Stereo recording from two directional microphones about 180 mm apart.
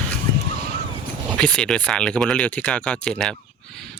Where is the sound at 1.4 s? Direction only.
5° left (ahead or behind).